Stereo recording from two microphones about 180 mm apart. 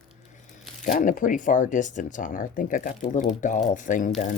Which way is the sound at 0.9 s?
45° left (ahead or behind).